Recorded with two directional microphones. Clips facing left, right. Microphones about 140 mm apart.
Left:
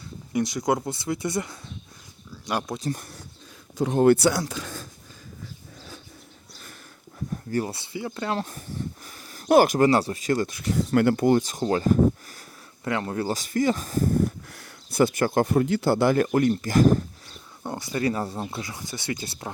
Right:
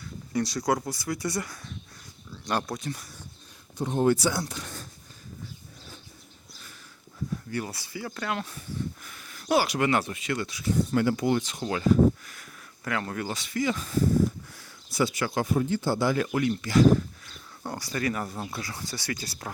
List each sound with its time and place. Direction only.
0.3 s speech: 20° left (ahead or behind)
2.3 s a sound: 10° left (ahead or behind)
2.7 s speech: 35° left (ahead or behind)
3.8 s speech: 80° left
7.5 s speech: 30° left (ahead or behind); by 10.7 s 50° left (ahead or behind)
10.7 s speech: 70° left (ahead or behind); by 12.5 s 40° left (ahead or behind)
12.8 s speech: 25° left (ahead or behind)
13.2 s speech: 40° left (ahead or behind)
17.6 s speech: 20° left (ahead or behind)